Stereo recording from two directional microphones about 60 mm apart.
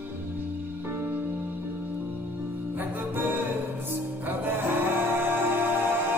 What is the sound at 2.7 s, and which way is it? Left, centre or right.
Music, right.